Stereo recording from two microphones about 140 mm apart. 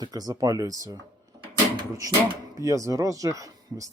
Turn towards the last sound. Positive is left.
turn(degrees=-25)  # may be behind; listen again after turning